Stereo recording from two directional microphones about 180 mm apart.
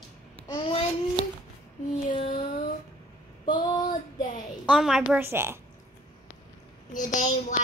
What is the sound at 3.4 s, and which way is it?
Child singing, 25° left (ahead or behind).